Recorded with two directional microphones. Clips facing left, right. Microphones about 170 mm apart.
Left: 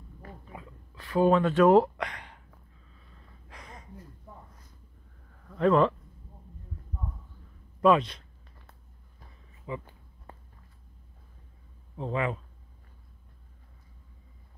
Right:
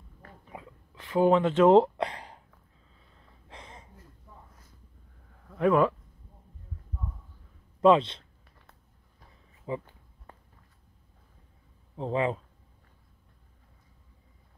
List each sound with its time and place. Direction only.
0.5 s a sound: 20° right (ahead or behind)
3.4 s gasp: 25° right (ahead or behind)
5.5 s speech: 10° right (ahead or behind)
7.8 s speech: 25° right (ahead or behind)
9.7 s speech: 35° right (ahead or behind)
12.0 s speech: 30° right (ahead or behind)